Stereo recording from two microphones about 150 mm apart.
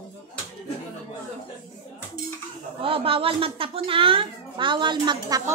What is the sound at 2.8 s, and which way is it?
A child's voice, 40° right (ahead or behind).